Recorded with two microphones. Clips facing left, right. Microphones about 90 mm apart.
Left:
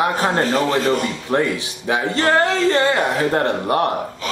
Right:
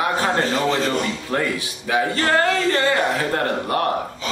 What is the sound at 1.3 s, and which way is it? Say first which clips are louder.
A man's voice: left 4 dB; 20° left (ahead or behind).